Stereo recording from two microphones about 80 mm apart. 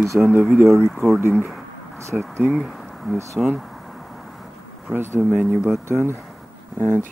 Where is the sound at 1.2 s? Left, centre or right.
Right.